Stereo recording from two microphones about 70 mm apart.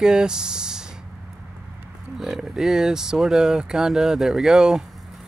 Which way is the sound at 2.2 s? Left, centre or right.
Centre.